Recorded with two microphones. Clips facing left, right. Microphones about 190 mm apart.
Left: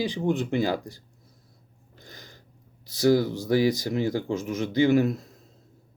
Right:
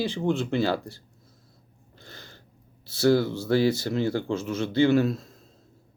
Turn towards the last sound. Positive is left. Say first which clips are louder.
# even
turn(degrees=20)  # may be behind; listen again after turning